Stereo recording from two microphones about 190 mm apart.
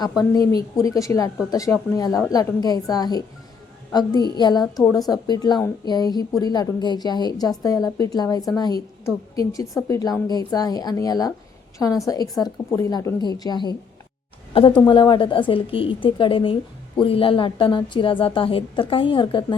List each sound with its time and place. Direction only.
0.2 s a woman's voice: 20° left (ahead or behind)
4.4 s a woman's voice: 20° left (ahead or behind)
4.8 s speech: 5° left (ahead or behind)
5.0 s a woman's voice: 20° left (ahead or behind)
14.8 s a woman's voice: 25° left (ahead or behind)